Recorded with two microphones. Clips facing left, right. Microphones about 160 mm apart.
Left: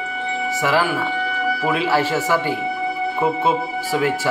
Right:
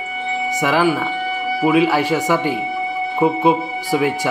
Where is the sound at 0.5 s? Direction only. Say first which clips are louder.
Right 3 dB; 15° right (ahead or behind).